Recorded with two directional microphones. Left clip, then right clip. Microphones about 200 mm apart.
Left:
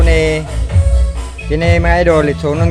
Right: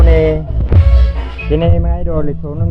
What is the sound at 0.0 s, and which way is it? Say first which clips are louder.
Music: right 1 dB; 15° left (ahead or behind).